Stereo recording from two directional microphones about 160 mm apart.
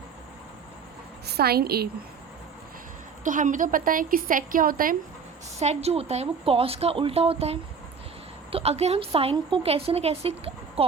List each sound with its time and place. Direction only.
1.3 s a woman's voice: 80° right
3.2 s a woman's voice: 55° right (ahead or behind)
5.5 s a woman's voice: 40° right (ahead or behind)